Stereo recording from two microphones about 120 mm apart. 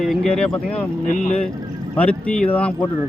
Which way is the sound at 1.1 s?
75° left (ahead or behind).